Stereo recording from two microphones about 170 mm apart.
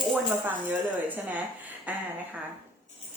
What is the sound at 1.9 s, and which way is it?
Speech, 10° right (ahead or behind).